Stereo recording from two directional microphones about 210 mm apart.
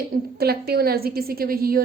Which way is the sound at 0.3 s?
50° right (ahead or behind).